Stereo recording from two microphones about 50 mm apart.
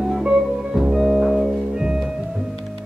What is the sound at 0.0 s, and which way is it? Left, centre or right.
Music, centre.